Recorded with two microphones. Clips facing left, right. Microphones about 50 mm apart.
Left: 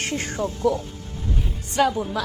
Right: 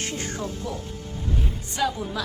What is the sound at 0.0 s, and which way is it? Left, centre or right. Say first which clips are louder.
Speech: left 4 dB; left.